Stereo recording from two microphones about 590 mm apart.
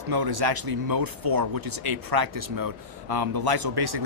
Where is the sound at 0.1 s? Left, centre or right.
Right.